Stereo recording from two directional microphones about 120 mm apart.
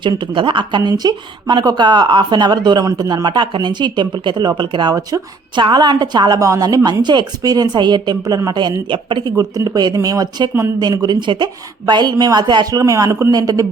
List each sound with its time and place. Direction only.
0.2 s speech: 45° right (ahead or behind)
7.0 s speech: 40° right (ahead or behind)
9.3 s speech: 30° right (ahead or behind)
12.8 s a man's voice: 25° right (ahead or behind)